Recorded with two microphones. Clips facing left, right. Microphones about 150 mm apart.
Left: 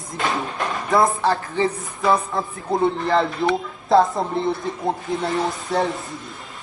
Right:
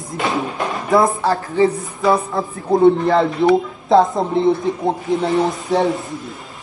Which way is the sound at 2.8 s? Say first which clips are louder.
Right 7 dB; 20° right (ahead or behind).